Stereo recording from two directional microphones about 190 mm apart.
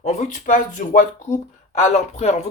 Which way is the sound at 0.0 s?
40° left (ahead or behind).